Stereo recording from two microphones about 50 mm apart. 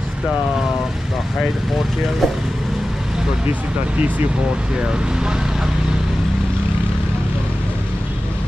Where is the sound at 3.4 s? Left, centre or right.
Right.